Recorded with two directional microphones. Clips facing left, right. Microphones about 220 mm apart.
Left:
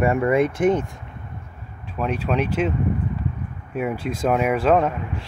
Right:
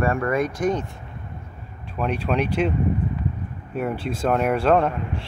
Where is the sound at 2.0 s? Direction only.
5° left (ahead or behind).